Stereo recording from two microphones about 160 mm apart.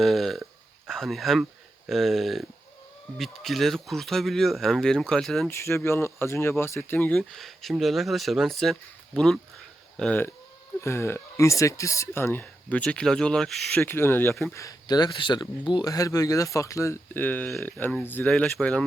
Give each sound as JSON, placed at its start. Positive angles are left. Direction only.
{"t": 0.0, "sound": "speech", "side_deg": 0}
{"t": 5.5, "sound": "speech", "side_deg": 15}
{"t": 13.8, "sound": "speech", "side_deg": 15}